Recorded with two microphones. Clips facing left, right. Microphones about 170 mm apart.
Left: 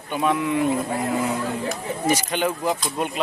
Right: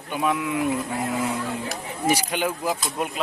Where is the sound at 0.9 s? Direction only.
40° left (ahead or behind).